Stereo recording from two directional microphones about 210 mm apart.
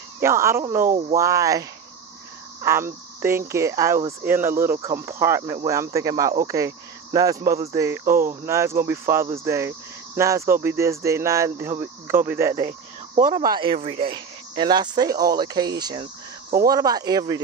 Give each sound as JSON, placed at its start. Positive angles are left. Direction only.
{"t": 0.2, "sound": "speech", "side_deg": -10}